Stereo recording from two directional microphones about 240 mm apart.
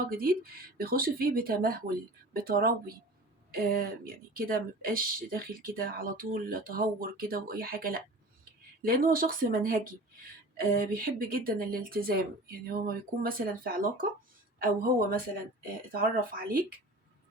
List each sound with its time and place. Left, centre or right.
0.8 s speech: right